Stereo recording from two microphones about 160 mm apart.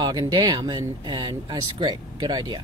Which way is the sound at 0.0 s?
25° right (ahead or behind).